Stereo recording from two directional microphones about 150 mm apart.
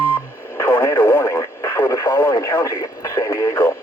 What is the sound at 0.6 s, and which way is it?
Radio, 15° left (ahead or behind).